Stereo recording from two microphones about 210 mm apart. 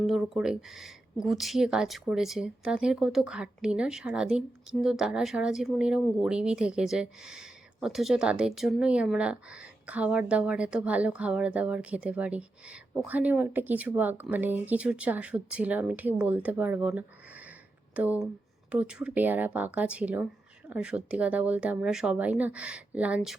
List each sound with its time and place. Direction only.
0.0 s speech: centre (ahead or behind)